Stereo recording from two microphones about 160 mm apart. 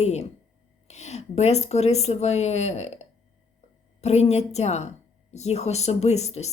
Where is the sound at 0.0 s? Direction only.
45° left (ahead or behind).